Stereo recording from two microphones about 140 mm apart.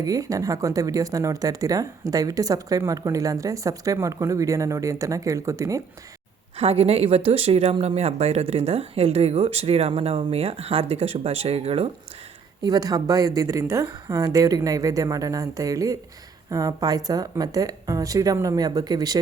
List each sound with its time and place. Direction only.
0.0 s speech: 25° right (ahead or behind)
6.6 s speech: 45° right (ahead or behind)
12.6 s speech: 25° right (ahead or behind)